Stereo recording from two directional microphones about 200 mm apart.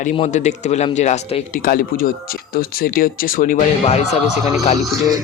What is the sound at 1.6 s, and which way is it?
Speech, 45° left (ahead or behind).